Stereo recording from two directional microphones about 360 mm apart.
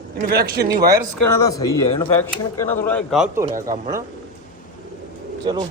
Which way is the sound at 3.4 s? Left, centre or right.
Centre.